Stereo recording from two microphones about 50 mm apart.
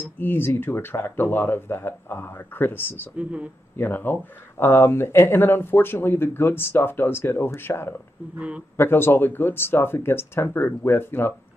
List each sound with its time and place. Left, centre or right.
0.0 s speech: left
3.2 s speech: right
3.7 s speech: left
8.4 s speech: right
8.7 s speech: left